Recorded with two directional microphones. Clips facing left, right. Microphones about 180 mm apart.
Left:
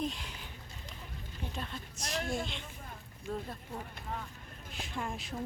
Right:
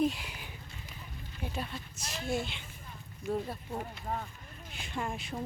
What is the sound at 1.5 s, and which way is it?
A woman's voice, 5° right (ahead or behind).